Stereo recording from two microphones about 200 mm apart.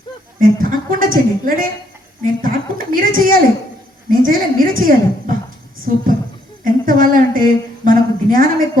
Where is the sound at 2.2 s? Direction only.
45° right (ahead or behind).